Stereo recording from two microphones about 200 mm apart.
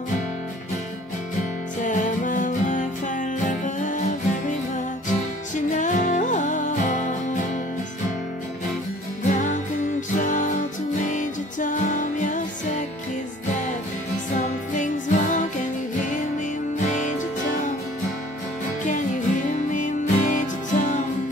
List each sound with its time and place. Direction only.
1.8 s music: 40° left (ahead or behind)
9.3 s music: 40° left (ahead or behind)
14.3 s music: 40° left (ahead or behind)
16.8 s music: 40° left (ahead or behind)
18.9 s music: 40° left (ahead or behind)